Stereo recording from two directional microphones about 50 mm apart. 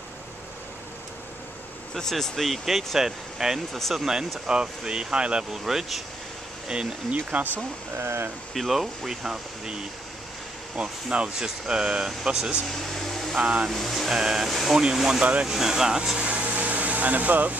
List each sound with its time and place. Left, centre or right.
2.0 s speech: centre
3.7 s speech: centre
4.0 s speech: centre
5.5 s speech: centre
6.7 s speech: right
8.0 s speech: right
8.5 s speech: centre
12.7 s speech: centre
13.4 s speech: right
13.7 s speech: centre
14.1 s speech: centre; by 17.6 s right